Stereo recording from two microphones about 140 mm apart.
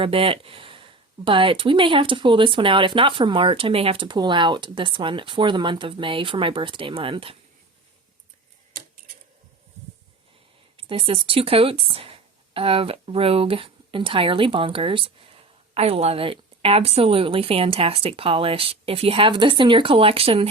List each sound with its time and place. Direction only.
0.0 s speech: 40° right (ahead or behind)
10.8 s speech: 40° right (ahead or behind)